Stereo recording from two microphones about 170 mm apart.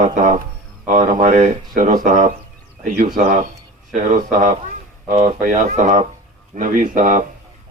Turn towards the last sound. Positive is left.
turn(degrees=-50)  # may be behind; listen again after turning